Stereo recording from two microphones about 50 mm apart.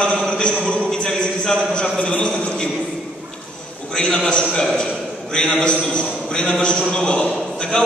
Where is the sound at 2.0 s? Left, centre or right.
Left.